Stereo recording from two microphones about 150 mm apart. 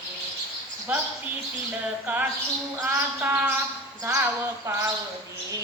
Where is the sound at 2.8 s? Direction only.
15° right (ahead or behind).